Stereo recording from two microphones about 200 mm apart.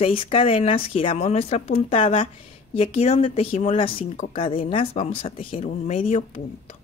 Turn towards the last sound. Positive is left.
turn(degrees=30)  # may be behind; listen again after turning